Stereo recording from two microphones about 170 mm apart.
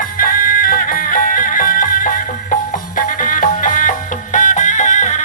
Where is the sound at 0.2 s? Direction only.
55° left (ahead or behind).